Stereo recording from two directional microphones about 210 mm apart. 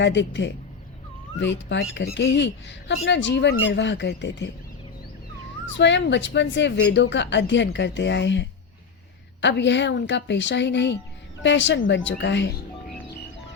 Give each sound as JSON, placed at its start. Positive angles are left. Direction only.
{"t": 0.0, "sound": "speech", "side_deg": 60}
{"t": 5.6, "sound": "speech", "side_deg": 60}